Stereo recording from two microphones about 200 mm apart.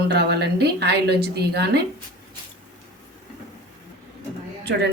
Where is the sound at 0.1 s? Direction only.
55° right (ahead or behind).